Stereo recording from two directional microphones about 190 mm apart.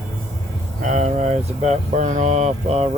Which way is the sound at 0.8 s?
40° right (ahead or behind).